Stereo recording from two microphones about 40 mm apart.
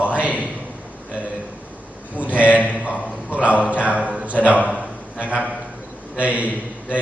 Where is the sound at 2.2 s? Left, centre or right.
Right.